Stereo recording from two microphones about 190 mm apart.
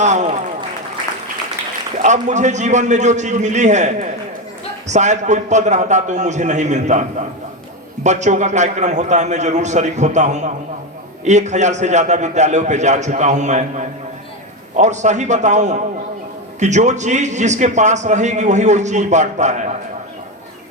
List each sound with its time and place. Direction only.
0.0 s a sound: 40° right (ahead or behind)
2.0 s a man's voice: 40° right (ahead or behind)
8.0 s a man's voice: 40° right (ahead or behind)